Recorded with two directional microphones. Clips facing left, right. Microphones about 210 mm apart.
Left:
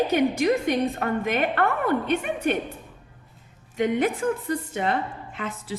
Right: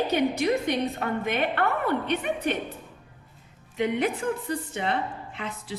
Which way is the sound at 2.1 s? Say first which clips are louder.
Left 2 dB; 50° left (ahead or behind).